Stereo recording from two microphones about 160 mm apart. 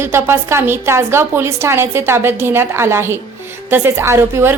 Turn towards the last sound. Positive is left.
turn(degrees=-15)  # may be behind; listen again after turning